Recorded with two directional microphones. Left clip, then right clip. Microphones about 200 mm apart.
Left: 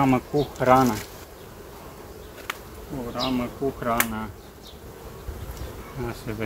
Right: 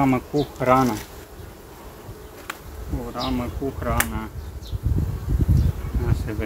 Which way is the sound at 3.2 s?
Centre (ahead or behind).